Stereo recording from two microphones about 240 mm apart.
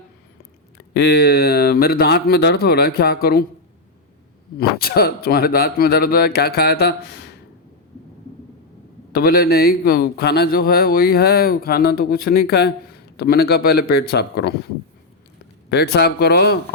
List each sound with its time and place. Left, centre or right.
0.9 s a man's voice: left
4.5 s a man's voice: left
9.1 s a man's voice: left
15.7 s speech: left